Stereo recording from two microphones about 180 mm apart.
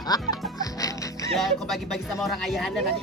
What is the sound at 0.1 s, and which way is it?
Music, 20° left (ahead or behind).